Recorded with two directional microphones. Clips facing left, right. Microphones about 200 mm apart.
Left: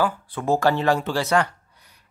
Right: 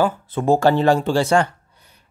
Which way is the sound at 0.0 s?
25° right (ahead or behind).